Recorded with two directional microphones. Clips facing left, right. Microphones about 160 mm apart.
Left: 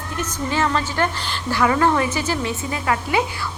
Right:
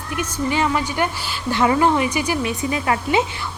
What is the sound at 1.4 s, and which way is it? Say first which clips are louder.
Speech: right 1 dB; 20° right (ahead or behind).